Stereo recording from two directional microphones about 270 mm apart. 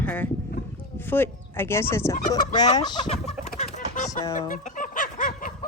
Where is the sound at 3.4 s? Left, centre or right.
Left.